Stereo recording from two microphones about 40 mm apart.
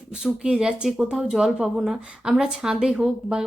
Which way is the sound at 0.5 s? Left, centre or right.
Centre.